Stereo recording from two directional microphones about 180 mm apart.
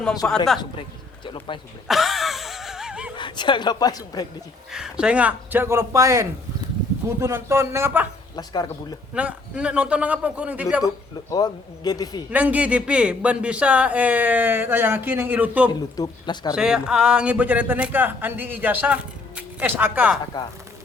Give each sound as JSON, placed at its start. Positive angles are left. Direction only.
{"t": 0.2, "sound": "speech", "side_deg": 5}
{"t": 0.6, "sound": "speech", "side_deg": 30}
{"t": 1.9, "sound": "a sound", "side_deg": 0}
{"t": 3.2, "sound": "speech", "side_deg": 25}
{"t": 4.7, "sound": "a man's voice", "side_deg": -5}
{"t": 8.4, "sound": "speech", "side_deg": 20}
{"t": 9.1, "sound": "a man's voice", "side_deg": -5}
{"t": 10.8, "sound": "speech", "side_deg": 20}
{"t": 12.3, "sound": "a man's voice", "side_deg": -10}
{"t": 16.0, "sound": "speech", "side_deg": 25}
{"t": 16.6, "sound": "a man's voice", "side_deg": -5}